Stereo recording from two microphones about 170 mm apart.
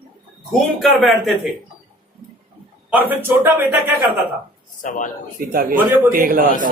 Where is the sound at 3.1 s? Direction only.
10° right (ahead or behind).